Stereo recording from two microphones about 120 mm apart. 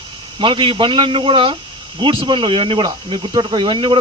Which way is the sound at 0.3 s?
45° right (ahead or behind).